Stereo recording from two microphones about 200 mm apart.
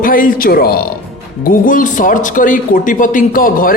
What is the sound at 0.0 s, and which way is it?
Speech, 45° left (ahead or behind).